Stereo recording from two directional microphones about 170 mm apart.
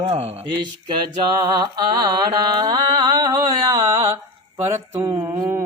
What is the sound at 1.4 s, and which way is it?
Music, 20° right (ahead or behind).